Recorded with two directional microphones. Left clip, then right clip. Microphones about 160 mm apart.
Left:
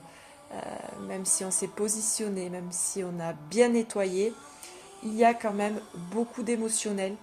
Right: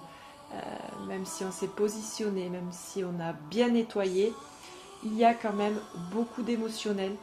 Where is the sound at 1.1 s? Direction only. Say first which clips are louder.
Left 5 dB; 50° left (ahead or behind).